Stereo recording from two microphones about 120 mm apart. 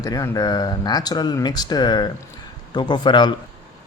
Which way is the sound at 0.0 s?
30° left (ahead or behind).